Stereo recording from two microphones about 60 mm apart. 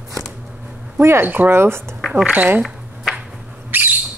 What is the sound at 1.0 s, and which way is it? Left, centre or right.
Speech, right.